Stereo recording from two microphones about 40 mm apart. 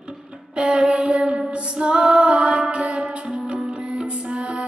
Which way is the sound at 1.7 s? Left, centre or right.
Right.